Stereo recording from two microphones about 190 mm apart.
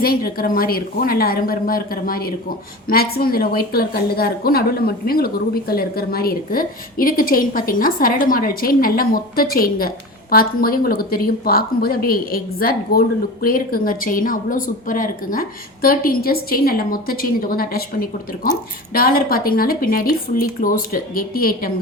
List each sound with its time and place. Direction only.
0.0 s a woman's voice: 50° left (ahead or behind)